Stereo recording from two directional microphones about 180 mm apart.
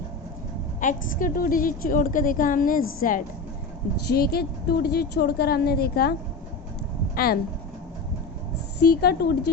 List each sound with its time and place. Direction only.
0.8 s a woman's voice: 45° left (ahead or behind)
8.8 s a woman's voice: 60° left (ahead or behind)